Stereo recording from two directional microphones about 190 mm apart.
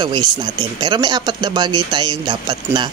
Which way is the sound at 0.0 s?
25° right (ahead or behind).